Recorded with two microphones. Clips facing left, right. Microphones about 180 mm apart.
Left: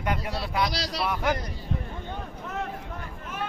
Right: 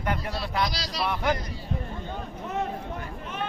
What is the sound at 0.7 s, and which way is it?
Speech, 65° left (ahead or behind).